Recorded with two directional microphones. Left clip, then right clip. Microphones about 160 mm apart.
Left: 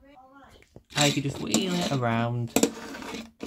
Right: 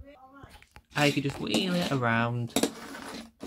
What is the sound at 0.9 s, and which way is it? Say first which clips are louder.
Speech: left 1 dB; 15° left (ahead or behind).